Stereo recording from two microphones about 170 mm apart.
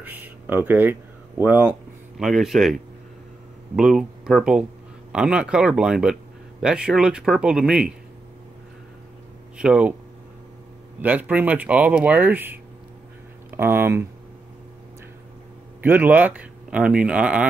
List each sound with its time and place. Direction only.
0.0 s speech: 10° right (ahead or behind)
9.6 s speech: 5° right (ahead or behind)
11.0 s speech: 10° right (ahead or behind)
15.8 s speech: 10° right (ahead or behind)